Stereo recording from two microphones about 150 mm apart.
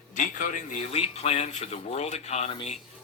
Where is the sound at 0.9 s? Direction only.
45° left (ahead or behind).